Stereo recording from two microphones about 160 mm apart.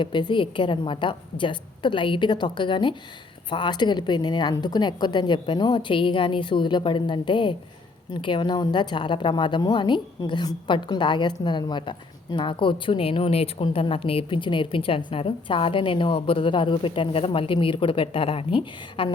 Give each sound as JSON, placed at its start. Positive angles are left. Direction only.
{"t": 0.0, "sound": "a woman's voice", "side_deg": 30}